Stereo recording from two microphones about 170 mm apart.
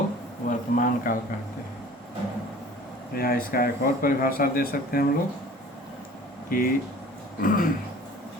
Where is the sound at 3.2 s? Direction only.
60° left (ahead or behind).